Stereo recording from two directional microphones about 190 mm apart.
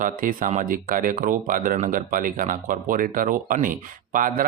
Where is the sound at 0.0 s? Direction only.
45° right (ahead or behind).